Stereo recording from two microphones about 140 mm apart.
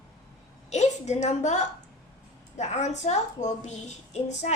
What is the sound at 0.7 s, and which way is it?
A woman's voice, 55° left (ahead or behind).